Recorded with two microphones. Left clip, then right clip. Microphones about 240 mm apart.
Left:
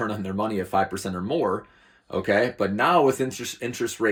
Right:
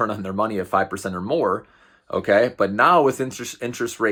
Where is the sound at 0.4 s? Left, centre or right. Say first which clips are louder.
Right 2 dB; centre.